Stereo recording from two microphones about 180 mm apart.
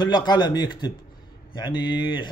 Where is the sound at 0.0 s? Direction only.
25° left (ahead or behind).